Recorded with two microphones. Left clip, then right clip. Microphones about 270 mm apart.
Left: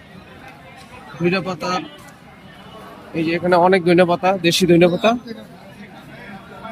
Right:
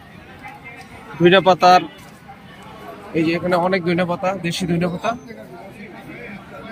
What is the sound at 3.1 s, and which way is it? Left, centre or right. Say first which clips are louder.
Speech: left 2 dB; centre.